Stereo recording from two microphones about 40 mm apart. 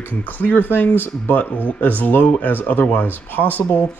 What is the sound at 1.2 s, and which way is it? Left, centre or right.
Speech, left.